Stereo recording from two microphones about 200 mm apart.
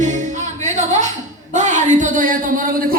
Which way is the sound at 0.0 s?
35° right (ahead or behind).